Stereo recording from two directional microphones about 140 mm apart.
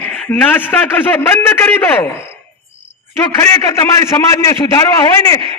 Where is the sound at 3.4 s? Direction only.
20° left (ahead or behind).